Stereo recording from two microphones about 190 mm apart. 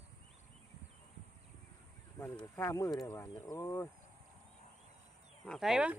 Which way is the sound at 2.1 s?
20° left (ahead or behind).